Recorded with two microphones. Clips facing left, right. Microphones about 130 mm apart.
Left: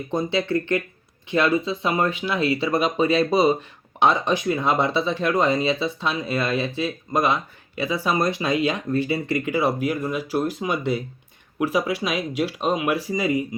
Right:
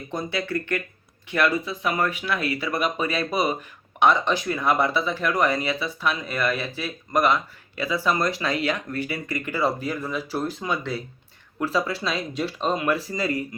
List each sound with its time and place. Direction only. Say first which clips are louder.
0.1 s speech: left 5 dB; 25° left (ahead or behind)